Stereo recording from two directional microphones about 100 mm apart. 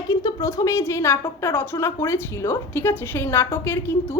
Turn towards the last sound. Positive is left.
turn(degrees=25)  # may be behind; listen again after turning